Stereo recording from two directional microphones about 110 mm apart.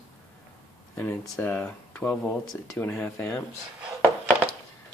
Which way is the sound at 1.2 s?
25° left (ahead or behind).